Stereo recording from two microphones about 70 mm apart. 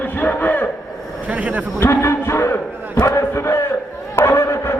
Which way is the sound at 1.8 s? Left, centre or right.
Left.